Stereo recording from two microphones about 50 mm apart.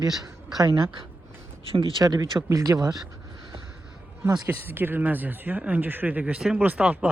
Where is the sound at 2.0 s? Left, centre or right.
Right.